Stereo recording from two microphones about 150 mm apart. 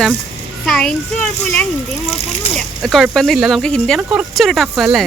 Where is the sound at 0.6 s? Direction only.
Centre (ahead or behind).